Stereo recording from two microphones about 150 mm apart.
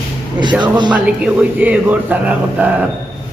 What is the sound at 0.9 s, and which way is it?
Speech, 10° right (ahead or behind).